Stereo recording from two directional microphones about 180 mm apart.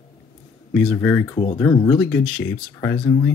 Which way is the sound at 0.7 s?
Centre (ahead or behind).